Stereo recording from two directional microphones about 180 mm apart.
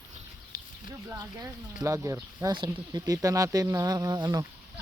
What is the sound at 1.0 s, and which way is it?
Speech, 20° right (ahead or behind).